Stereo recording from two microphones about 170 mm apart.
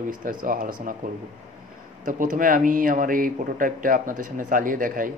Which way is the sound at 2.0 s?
50° right (ahead or behind).